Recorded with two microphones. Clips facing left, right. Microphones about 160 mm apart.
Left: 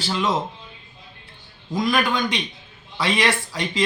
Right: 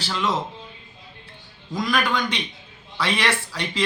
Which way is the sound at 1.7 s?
20° left (ahead or behind).